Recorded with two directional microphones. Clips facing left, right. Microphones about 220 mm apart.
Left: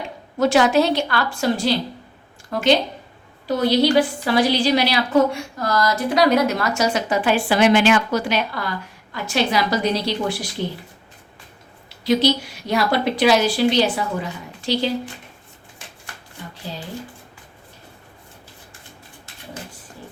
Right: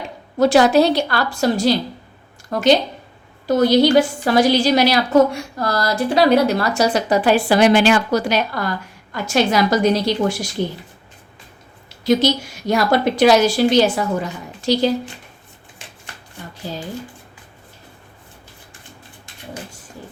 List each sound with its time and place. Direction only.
0.3 s a woman's voice: 35° right (ahead or behind)
12.0 s a woman's voice: 45° right (ahead or behind)